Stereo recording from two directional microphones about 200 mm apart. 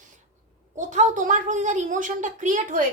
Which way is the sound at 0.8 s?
35° right (ahead or behind).